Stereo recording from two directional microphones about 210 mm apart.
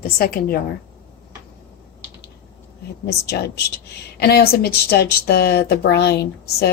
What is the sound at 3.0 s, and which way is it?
A woman's voice, 50° left (ahead or behind).